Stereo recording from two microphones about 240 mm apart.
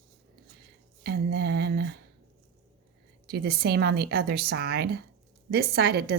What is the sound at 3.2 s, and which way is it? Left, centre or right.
A woman's voice, right.